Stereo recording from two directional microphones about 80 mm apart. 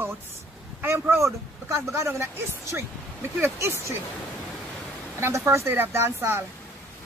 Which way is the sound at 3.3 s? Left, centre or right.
Right.